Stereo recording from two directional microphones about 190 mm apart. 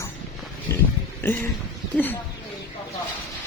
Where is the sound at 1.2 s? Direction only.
10° left (ahead or behind).